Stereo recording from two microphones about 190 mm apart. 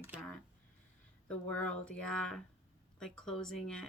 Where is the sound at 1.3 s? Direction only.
5° left (ahead or behind).